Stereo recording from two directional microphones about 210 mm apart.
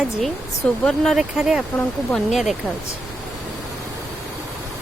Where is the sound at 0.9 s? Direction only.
Centre (ahead or behind).